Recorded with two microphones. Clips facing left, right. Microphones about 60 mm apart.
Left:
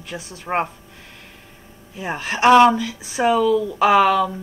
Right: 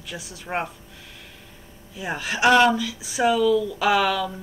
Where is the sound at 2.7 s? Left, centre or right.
Left.